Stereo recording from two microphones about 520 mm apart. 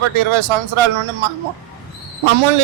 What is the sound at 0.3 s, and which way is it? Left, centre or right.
Speech, right.